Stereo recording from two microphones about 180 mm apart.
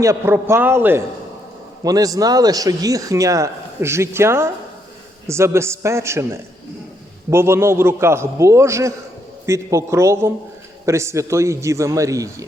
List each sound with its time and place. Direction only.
0.0 s a man's voice: 15° right (ahead or behind)